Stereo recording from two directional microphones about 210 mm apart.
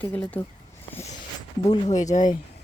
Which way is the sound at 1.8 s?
35° left (ahead or behind).